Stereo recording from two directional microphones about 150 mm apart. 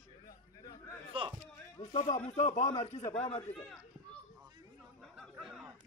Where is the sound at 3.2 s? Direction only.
45° left (ahead or behind).